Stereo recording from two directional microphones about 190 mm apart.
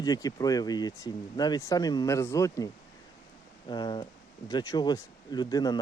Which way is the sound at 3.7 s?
25° left (ahead or behind).